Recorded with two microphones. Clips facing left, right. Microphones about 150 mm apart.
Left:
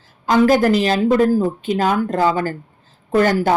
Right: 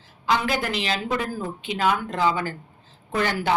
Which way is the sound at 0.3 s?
45° left (ahead or behind).